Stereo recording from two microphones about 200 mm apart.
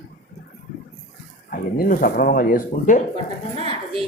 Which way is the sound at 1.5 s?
45° left (ahead or behind).